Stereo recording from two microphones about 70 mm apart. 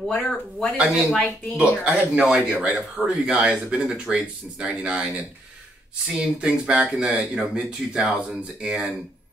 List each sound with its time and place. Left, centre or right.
0.0 s speech: centre
1.6 s speech: centre